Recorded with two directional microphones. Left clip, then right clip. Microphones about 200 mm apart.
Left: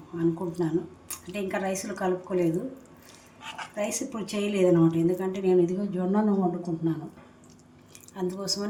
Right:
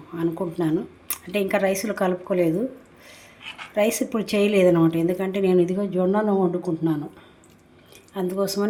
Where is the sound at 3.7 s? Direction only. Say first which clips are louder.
Right 10 dB; 40° right (ahead or behind).